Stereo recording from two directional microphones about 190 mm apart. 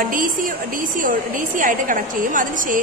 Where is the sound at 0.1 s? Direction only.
45° right (ahead or behind).